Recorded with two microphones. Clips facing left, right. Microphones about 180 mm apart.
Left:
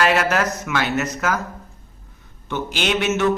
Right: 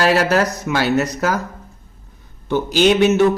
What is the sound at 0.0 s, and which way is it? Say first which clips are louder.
Speech: right 3 dB; 35° right (ahead or behind).